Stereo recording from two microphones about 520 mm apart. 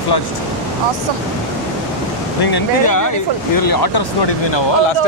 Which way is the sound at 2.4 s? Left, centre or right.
Left.